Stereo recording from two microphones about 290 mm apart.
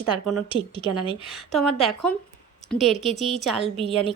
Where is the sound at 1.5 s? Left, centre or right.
Centre.